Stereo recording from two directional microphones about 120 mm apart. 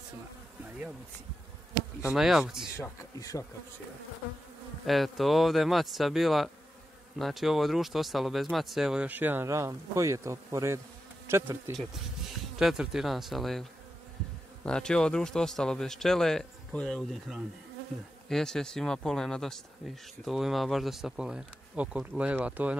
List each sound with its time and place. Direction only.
2.0 s speech: 5° right (ahead or behind)
2.8 s speech: 30° left (ahead or behind)
4.8 s speech: centre (ahead or behind); by 11.7 s 20° right (ahead or behind)
11.7 s speech: centre (ahead or behind)